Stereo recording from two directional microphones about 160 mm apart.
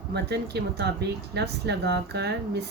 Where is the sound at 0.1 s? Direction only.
90° right.